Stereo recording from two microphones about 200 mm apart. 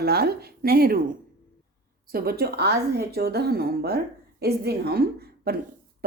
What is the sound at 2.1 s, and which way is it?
A woman's voice, 50° right (ahead or behind).